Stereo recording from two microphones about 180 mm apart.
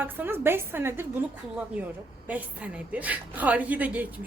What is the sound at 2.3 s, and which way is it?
Speech, 10° right (ahead or behind).